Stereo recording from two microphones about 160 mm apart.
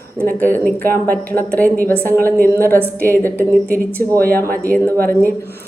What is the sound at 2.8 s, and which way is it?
Speech, 15° right (ahead or behind).